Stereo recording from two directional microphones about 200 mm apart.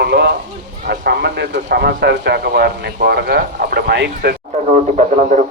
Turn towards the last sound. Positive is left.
turn(degrees=-35)  # may be behind; listen again after turning